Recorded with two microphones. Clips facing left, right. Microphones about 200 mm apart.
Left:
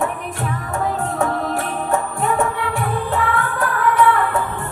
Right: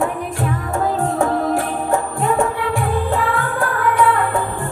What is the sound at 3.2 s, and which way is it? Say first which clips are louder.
Music: right 1 dB; 25° right (ahead or behind).